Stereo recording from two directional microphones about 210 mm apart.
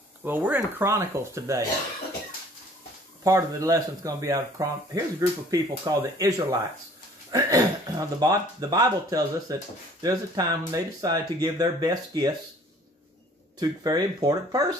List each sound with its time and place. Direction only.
0.2 s speech: 10° right (ahead or behind)
3.3 s speech: 15° right (ahead or behind)
13.6 s speech: 20° right (ahead or behind)